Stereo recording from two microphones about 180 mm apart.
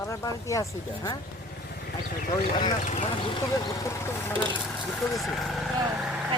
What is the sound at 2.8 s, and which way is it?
Speech, 40° left (ahead or behind).